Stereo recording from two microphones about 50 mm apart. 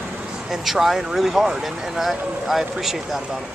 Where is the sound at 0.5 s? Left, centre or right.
Centre.